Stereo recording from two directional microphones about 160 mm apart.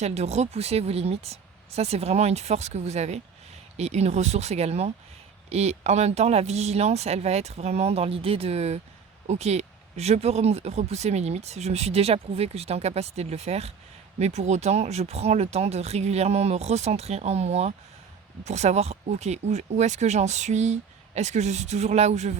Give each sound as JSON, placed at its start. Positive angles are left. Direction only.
{"t": 0.0, "sound": "speech", "side_deg": -45}